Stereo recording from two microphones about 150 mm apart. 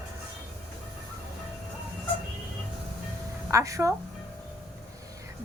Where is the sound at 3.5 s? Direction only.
20° right (ahead or behind).